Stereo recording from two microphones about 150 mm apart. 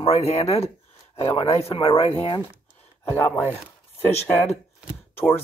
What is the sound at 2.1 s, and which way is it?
Speech, 15° left (ahead or behind).